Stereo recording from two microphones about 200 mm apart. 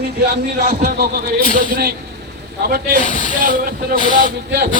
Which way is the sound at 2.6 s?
50° right (ahead or behind).